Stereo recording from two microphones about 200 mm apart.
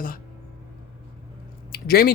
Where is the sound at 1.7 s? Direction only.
50° left (ahead or behind).